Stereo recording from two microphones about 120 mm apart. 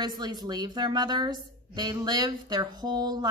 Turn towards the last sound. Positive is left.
turn(degrees=-35)  # may be behind; listen again after turning